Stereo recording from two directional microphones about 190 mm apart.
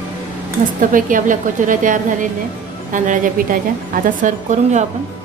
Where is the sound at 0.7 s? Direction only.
45° right (ahead or behind).